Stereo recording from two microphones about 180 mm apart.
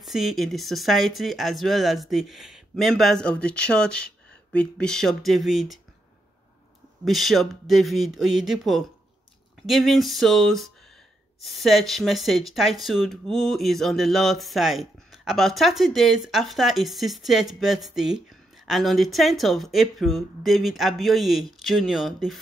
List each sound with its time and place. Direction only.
0.0 s speech: centre (ahead or behind)
7.1 s speech: centre (ahead or behind)